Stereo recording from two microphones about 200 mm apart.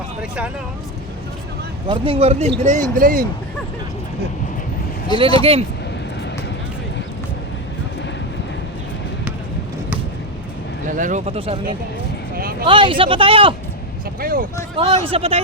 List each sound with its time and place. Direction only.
0.2 s speech: 5° right (ahead or behind)
1.9 s speech: 30° right (ahead or behind); by 3.2 s 45° right (ahead or behind)
5.4 s speech: 30° right (ahead or behind)
10.8 s speech: 40° right (ahead or behind)
12.4 s a sound: 45° right (ahead or behind)
12.6 s speech: 25° right (ahead or behind)
14.2 s speech: 45° right (ahead or behind)
14.8 s speech: 30° right (ahead or behind)